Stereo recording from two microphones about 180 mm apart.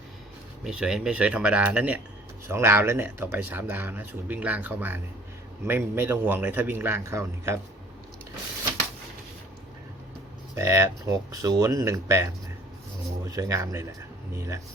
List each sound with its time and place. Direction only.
0.6 s speech: 5° right (ahead or behind)
10.5 s speech: 15° right (ahead or behind)
13.2 s speech: 20° right (ahead or behind)